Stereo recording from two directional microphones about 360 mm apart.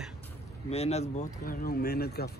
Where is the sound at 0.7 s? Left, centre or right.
Centre.